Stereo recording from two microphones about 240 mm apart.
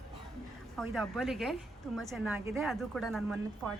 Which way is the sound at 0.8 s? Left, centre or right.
Centre.